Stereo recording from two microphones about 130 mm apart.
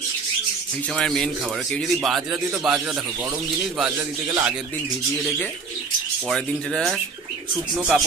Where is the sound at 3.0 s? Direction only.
25° right (ahead or behind).